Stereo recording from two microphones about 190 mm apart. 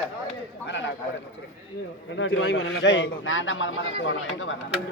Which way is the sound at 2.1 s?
85° left.